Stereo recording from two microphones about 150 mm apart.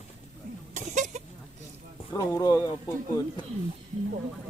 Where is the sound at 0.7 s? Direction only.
55° right (ahead or behind).